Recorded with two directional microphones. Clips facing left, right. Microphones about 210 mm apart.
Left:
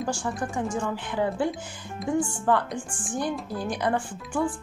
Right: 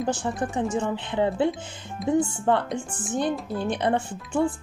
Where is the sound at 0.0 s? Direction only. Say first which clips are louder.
Right 3 dB; 20° right (ahead or behind).